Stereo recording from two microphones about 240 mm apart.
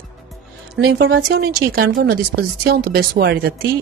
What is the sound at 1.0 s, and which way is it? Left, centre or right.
Speech, right.